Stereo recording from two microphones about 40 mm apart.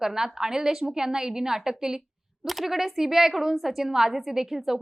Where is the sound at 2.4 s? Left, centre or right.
Centre.